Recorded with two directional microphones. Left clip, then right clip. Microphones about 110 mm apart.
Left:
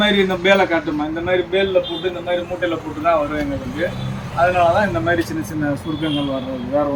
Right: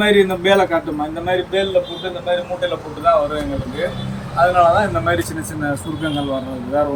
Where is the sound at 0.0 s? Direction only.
5° right (ahead or behind).